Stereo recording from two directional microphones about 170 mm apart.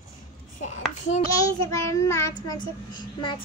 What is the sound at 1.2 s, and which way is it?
A child's voice, 20° left (ahead or behind).